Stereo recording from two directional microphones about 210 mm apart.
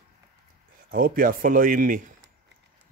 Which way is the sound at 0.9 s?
45° right (ahead or behind).